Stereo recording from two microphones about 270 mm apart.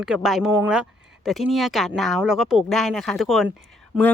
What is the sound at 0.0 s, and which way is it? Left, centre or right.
Speech, centre.